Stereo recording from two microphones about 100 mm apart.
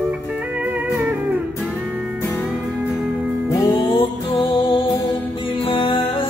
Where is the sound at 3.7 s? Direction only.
60° left (ahead or behind).